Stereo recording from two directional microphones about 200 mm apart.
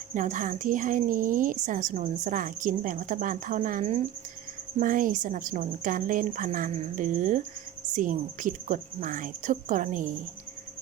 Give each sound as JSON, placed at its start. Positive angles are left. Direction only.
{"t": 0.1, "sound": "a woman's voice", "side_deg": -40}